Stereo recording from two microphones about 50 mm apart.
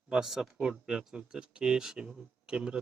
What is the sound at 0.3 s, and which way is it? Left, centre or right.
Speech, centre.